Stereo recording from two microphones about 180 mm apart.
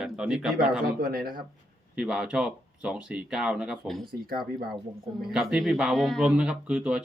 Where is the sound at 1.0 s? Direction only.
55° right (ahead or behind).